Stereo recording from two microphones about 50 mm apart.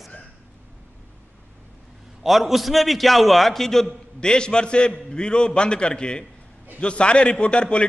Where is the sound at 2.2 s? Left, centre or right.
Centre.